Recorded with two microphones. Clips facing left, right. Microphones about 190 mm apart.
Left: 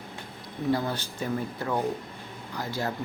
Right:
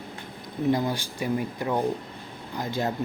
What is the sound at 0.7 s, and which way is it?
Speech, 15° right (ahead or behind).